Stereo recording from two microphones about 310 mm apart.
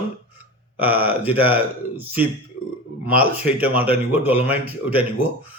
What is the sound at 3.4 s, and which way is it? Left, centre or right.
Speech, centre.